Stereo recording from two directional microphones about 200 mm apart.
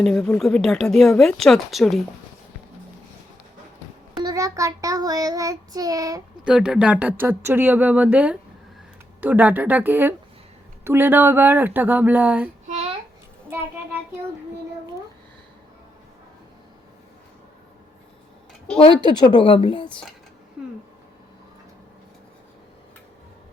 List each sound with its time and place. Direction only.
0.0 s speech: 5° left (ahead or behind)
4.2 s child singing: 20° right (ahead or behind)
6.4 s child singing: 5° right (ahead or behind)
12.6 s a sound: 30° right (ahead or behind)
18.9 s a woman's voice: 20° left (ahead or behind)